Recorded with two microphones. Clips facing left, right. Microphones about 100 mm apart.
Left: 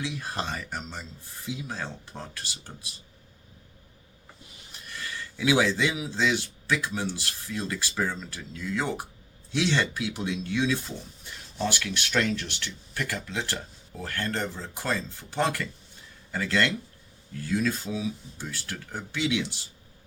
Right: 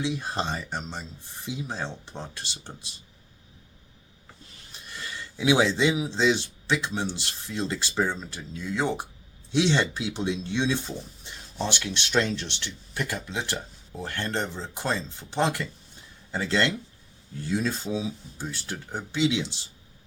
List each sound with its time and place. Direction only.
0.0 s speech: 25° right (ahead or behind)
4.9 s speech: 20° right (ahead or behind)